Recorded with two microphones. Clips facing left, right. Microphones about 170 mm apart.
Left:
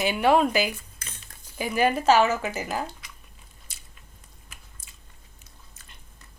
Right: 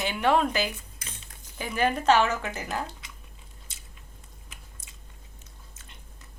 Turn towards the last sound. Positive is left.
turn(degrees=-20)  # may be behind; listen again after turning